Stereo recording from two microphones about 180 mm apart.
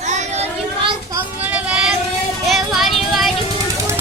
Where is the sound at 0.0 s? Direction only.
40° right (ahead or behind).